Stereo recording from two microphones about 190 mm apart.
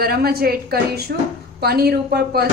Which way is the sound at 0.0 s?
50° right (ahead or behind).